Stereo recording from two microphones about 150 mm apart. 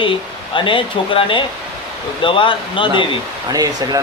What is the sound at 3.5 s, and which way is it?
Speech, 25° right (ahead or behind).